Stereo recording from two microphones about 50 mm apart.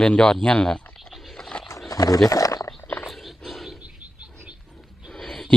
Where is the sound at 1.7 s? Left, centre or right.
Left.